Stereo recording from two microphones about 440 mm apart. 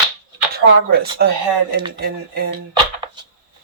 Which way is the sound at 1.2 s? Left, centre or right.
Right.